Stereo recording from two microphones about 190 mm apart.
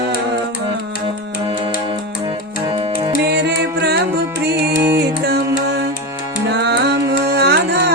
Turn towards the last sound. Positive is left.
turn(degrees=-60)  # may be behind; listen again after turning